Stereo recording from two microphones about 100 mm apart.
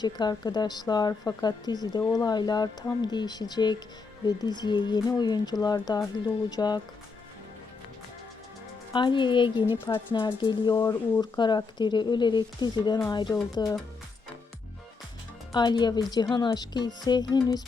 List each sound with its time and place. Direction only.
0.0 s speech: 45° left (ahead or behind)
8.9 s speech: 50° left (ahead or behind)
15.5 s speech: 45° left (ahead or behind)